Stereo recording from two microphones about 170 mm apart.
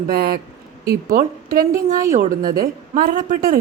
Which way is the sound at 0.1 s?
60° right (ahead or behind).